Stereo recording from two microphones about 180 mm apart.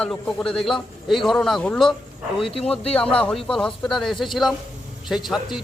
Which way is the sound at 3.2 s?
5° left (ahead or behind).